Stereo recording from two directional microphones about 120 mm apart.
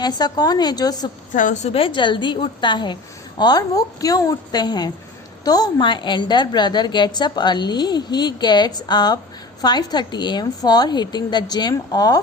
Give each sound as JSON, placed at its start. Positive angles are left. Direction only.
{"t": 0.0, "sound": "a woman's voice", "side_deg": 35}
{"t": 1.3, "sound": "a woman's voice", "side_deg": 90}
{"t": 1.7, "sound": "a woman's voice", "side_deg": 45}